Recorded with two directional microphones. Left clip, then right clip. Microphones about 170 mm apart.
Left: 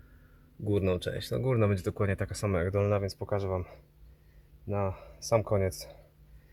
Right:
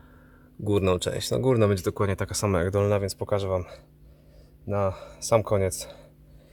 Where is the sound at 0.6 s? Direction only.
25° right (ahead or behind).